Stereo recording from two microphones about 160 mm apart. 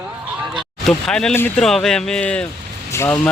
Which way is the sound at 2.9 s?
15° left (ahead or behind).